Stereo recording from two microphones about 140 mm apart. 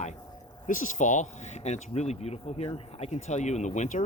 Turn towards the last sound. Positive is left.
turn(degrees=60)  # may be behind; listen again after turning